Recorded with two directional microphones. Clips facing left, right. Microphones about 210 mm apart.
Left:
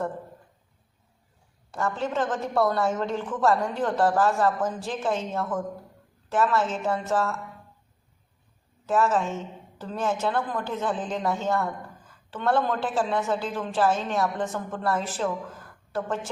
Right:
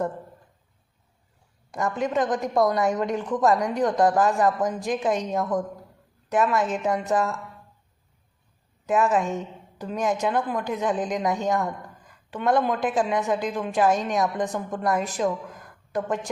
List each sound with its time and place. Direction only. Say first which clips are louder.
1.7 s speech: right 3 dB; 15° right (ahead or behind)
8.9 s speech: right 2 dB; 15° right (ahead or behind)